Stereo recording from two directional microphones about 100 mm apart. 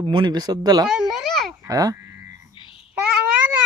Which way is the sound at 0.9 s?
Centre (ahead or behind).